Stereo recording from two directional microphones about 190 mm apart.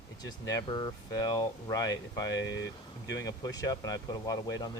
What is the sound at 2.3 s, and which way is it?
Speech, 75° left (ahead or behind).